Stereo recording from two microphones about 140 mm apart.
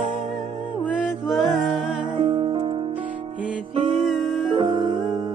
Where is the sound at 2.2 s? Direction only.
45° right (ahead or behind).